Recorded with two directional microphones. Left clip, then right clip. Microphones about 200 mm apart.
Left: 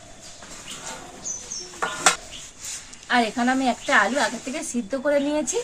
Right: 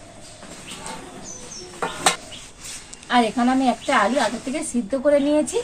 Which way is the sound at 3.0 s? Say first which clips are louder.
Right 2 dB; centre (ahead or behind).